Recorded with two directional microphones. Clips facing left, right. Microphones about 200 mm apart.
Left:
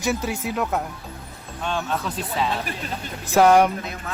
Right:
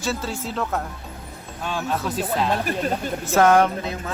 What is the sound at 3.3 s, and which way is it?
Speech, 10° left (ahead or behind).